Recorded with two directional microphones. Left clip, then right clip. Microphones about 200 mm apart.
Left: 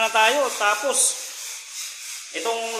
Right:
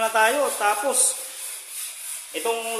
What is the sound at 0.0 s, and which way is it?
Speech, 15° right (ahead or behind).